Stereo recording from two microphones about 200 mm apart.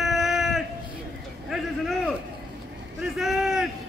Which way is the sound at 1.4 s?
Centre (ahead or behind).